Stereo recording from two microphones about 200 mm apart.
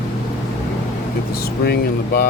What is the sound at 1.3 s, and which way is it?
Speech, 50° left (ahead or behind).